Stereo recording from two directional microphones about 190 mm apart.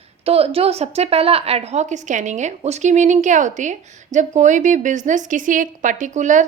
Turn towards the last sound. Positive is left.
turn(degrees=-40)  # may be behind; listen again after turning